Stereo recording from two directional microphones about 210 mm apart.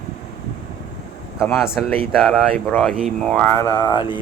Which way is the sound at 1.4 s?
Centre (ahead or behind).